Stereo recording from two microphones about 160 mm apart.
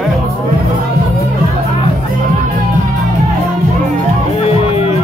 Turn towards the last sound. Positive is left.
turn(degrees=40)  # may be behind; listen again after turning